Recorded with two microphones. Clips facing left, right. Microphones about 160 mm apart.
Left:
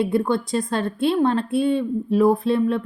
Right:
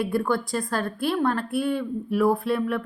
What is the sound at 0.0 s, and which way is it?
A woman's voice, 20° left (ahead or behind).